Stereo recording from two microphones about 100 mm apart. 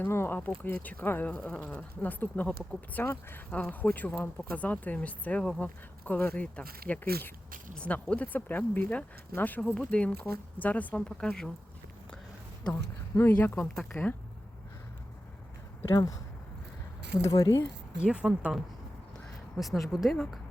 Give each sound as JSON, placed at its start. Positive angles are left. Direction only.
{"t": 0.0, "sound": "speech", "side_deg": 20}
{"t": 12.7, "sound": "speech", "side_deg": 25}
{"t": 15.9, "sound": "speech", "side_deg": 35}
{"t": 17.9, "sound": "speech", "side_deg": -10}
{"t": 19.5, "sound": "a woman's voice", "side_deg": 0}